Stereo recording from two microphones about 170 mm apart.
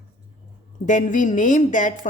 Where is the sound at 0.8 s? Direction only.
50° left (ahead or behind).